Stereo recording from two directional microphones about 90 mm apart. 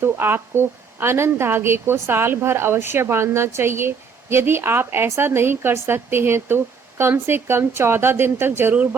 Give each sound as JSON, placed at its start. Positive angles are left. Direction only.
{"t": 0.0, "sound": "a woman's voice", "side_deg": -25}